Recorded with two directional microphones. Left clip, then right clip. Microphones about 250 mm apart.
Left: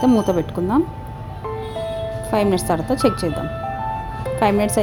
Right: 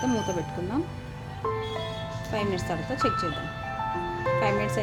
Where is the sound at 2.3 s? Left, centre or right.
Left.